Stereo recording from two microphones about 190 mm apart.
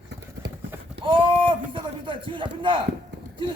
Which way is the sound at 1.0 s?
25° right (ahead or behind).